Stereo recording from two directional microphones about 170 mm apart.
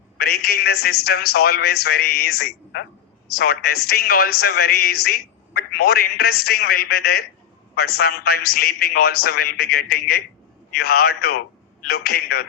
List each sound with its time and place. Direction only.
0.2 s a man's voice: 65° left (ahead or behind)